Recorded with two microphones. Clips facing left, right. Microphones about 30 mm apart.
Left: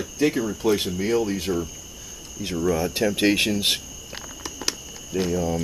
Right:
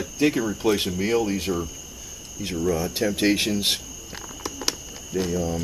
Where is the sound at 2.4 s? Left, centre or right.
Centre.